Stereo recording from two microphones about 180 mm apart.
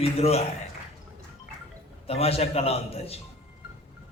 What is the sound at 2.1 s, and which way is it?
A man's voice, 35° left (ahead or behind).